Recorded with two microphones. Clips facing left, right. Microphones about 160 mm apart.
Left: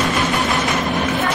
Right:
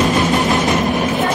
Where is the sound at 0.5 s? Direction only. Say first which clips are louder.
Right 4 dB; 25° right (ahead or behind).